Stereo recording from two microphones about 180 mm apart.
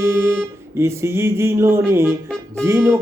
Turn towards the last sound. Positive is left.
turn(degrees=-15)  # may be behind; listen again after turning